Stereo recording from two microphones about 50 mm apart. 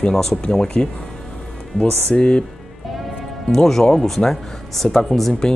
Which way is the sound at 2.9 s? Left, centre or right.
Centre.